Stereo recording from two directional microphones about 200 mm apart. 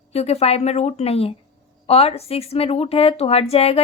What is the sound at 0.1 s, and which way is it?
A woman's voice, 30° left (ahead or behind).